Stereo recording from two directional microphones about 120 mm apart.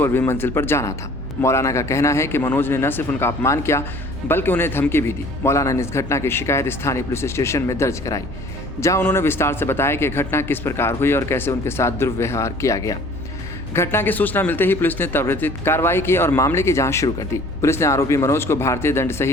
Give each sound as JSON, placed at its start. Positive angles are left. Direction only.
{"t": 0.0, "sound": "speech", "side_deg": 20}